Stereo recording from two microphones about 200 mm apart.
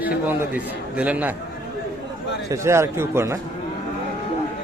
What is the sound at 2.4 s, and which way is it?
Speech, 15° right (ahead or behind).